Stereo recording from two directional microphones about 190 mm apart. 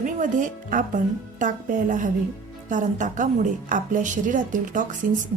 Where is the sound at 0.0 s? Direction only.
45° right (ahead or behind).